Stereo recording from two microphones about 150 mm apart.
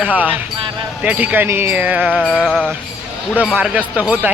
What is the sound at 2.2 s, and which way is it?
Music, 5° left (ahead or behind).